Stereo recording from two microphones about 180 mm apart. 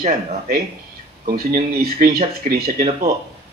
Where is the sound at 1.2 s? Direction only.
55° right (ahead or behind).